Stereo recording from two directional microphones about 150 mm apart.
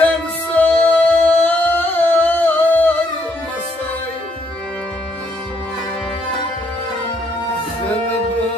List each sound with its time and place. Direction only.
0.6 s music: 10° left (ahead or behind)